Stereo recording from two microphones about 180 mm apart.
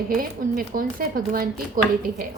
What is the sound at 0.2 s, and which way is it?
Speech, 50° right (ahead or behind).